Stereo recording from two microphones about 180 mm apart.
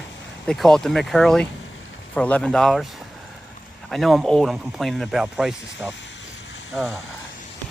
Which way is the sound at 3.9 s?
Centre (ahead or behind).